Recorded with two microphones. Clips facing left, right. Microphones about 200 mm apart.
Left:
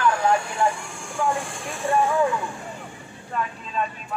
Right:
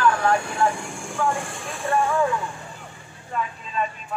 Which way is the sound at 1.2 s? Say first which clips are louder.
Even; 20° left (ahead or behind).